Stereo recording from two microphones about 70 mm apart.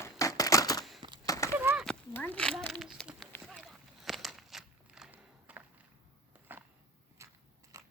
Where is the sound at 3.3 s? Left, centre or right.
Left.